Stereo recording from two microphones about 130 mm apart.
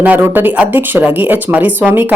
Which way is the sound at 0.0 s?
15° right (ahead or behind).